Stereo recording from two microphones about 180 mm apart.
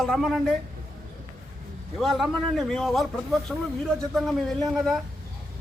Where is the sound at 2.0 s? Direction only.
Centre (ahead or behind).